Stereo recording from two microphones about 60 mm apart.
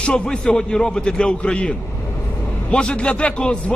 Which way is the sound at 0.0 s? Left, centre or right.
Centre.